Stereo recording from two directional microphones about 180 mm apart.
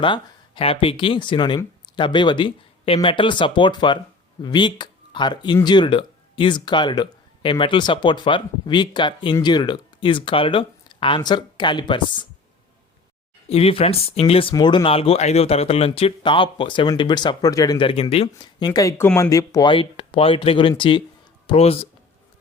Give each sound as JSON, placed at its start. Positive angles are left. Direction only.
{"t": 0.0, "sound": "speech", "side_deg": 25}
{"t": 13.5, "sound": "speech", "side_deg": 30}